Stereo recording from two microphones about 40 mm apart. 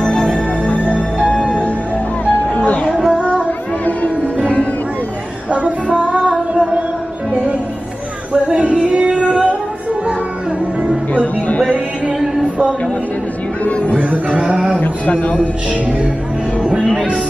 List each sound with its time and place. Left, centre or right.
0.0 s music: left
0.8 s music: right
2.5 s music: left
2.9 s child singing: centre
5.5 s music: right
8.3 s female singing: right
11.1 s music: left
13.9 s a sound: right
14.8 s a sound: left
15.7 s music: right
16.6 s music: right